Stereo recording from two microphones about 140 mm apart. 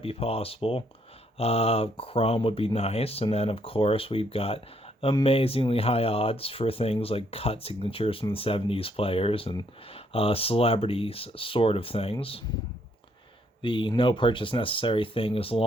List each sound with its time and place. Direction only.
0.0 s speech: 45° left (ahead or behind)
13.6 s speech: 35° left (ahead or behind)